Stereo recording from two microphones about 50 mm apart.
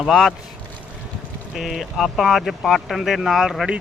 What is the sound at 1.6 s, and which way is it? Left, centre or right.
Speech, centre.